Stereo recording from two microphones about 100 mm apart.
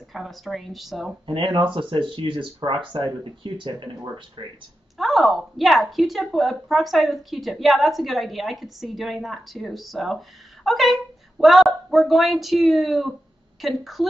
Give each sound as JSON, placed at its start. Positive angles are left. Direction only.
{"t": 0.1, "sound": "a woman's voice", "side_deg": 0}
{"t": 1.2, "sound": "speech", "side_deg": -60}
{"t": 4.9, "sound": "a woman's voice", "side_deg": 0}